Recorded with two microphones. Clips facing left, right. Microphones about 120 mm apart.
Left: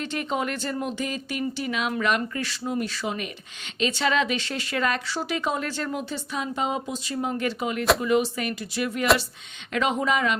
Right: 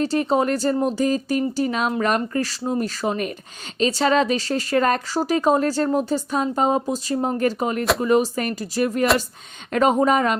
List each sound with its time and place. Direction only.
0.0 s speech: 35° right (ahead or behind)